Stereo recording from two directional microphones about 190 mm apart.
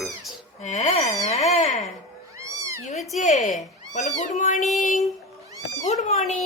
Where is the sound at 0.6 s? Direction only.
35° left (ahead or behind).